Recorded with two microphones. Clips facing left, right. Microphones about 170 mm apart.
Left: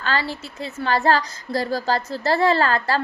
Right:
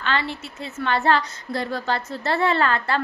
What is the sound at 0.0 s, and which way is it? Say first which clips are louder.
A woman's voice: left 1 dB; 35° left (ahead or behind).